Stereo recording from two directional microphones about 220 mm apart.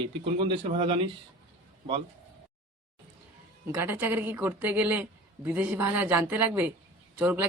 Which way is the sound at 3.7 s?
10° right (ahead or behind).